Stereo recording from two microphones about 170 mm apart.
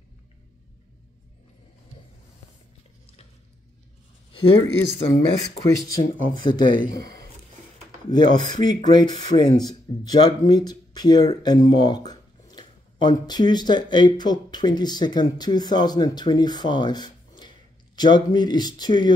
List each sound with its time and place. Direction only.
4.3 s speech: 30° left (ahead or behind)
8.1 s speech: 25° left (ahead or behind)